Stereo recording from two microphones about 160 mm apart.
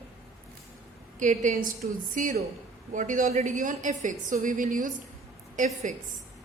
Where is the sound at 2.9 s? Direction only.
55° right (ahead or behind).